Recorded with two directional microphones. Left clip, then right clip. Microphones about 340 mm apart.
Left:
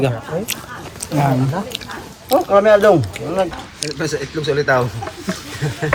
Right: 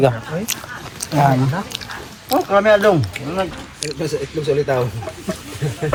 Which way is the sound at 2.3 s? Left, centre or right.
Left.